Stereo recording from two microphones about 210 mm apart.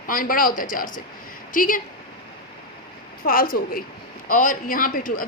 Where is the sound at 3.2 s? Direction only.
45° left (ahead or behind).